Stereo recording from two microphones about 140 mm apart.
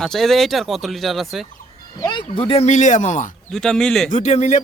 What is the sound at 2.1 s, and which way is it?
Speech, 35° left (ahead or behind).